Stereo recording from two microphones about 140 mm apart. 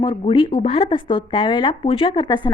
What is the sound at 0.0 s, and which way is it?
Speech, 40° left (ahead or behind).